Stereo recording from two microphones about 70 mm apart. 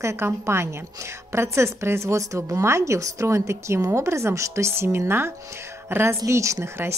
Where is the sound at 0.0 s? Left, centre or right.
Right.